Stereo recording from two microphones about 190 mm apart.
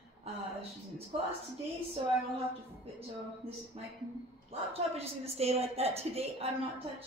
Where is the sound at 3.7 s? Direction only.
30° right (ahead or behind).